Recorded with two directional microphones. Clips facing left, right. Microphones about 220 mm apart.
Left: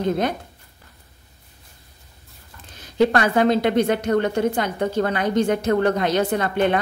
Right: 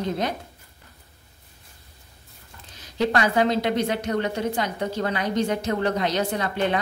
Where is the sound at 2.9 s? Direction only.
55° left (ahead or behind).